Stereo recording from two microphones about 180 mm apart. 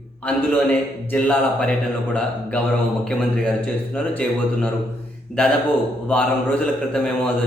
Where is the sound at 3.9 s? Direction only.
5° left (ahead or behind).